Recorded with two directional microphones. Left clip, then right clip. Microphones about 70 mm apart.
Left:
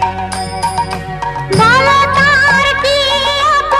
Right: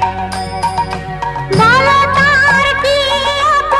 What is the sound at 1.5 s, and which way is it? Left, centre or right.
Music, left.